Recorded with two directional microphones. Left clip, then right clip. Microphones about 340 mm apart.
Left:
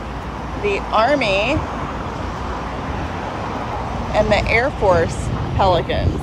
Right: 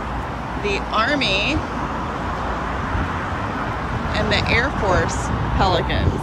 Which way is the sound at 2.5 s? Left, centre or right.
Centre.